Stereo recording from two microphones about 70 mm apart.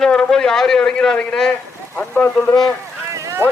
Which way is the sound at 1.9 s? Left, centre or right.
Left.